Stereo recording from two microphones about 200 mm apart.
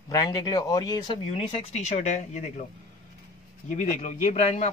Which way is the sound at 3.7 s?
35° left (ahead or behind).